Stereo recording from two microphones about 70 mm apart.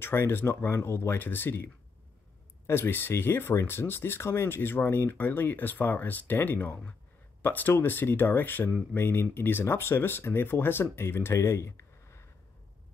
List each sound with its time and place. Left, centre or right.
0.0 s speech: left